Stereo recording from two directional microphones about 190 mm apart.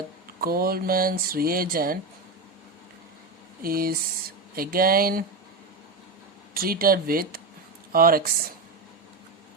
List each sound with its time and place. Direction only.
0.3 s speech: 50° right (ahead or behind)
3.6 s speech: 50° right (ahead or behind)
6.5 s speech: 50° right (ahead or behind)